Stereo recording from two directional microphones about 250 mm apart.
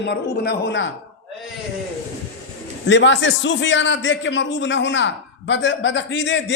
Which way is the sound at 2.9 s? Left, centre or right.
Left.